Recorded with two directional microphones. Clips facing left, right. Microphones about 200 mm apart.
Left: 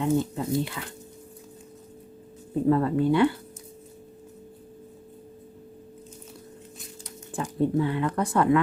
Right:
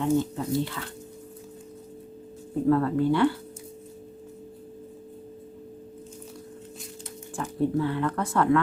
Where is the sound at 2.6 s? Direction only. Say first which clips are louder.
Even; 20° left (ahead or behind).